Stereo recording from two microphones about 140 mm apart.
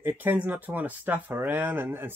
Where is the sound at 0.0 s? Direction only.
15° right (ahead or behind).